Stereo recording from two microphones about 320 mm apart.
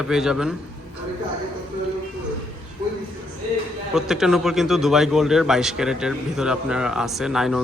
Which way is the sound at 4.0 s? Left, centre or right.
Centre.